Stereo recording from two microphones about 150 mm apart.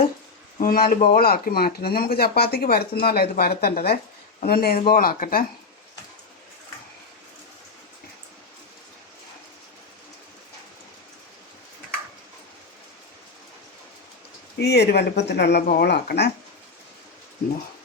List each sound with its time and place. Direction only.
0.6 s speech: 70° left (ahead or behind); by 4.8 s 85° left
4.9 s speech: 70° left (ahead or behind)
14.6 s speech: 90° left